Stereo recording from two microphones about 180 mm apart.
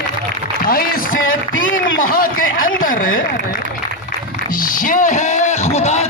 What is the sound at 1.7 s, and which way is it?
Speech, 55° left (ahead or behind).